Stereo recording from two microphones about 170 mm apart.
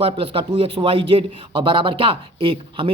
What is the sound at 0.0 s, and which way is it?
A man's voice, 35° right (ahead or behind).